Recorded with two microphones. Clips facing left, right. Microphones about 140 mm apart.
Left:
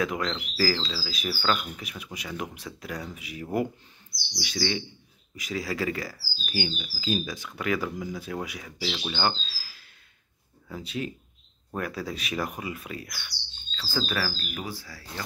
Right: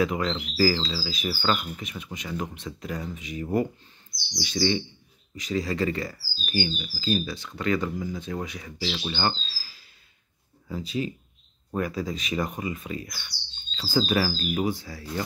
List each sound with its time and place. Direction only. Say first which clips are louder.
0.0 s speech: right 3 dB; centre (ahead or behind)
10.7 s speech: right 4 dB; centre (ahead or behind)
13.7 s speech: right 6 dB; 15° right (ahead or behind)